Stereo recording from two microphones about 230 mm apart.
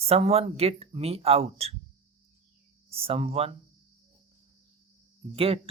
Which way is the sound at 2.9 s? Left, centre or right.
Right.